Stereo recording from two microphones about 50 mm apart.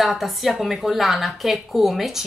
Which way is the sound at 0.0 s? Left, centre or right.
Centre.